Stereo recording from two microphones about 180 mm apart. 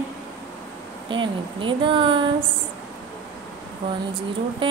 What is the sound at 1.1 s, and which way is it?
Speech, 25° right (ahead or behind).